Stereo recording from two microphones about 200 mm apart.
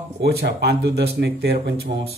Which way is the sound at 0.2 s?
55° right (ahead or behind).